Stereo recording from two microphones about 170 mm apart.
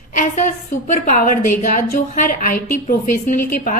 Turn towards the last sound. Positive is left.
turn(degrees=50)  # may be behind; listen again after turning